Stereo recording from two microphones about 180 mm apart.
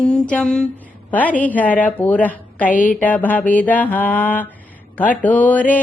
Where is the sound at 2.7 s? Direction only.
50° left (ahead or behind).